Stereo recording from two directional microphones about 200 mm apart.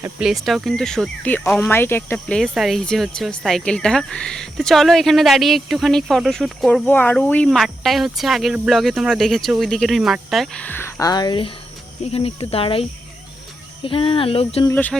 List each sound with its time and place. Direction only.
0.0 s speech: 5° right (ahead or behind); by 12.8 s 30° left (ahead or behind)
13.8 s speech: 25° left (ahead or behind)
14.7 s speech: 10° left (ahead or behind)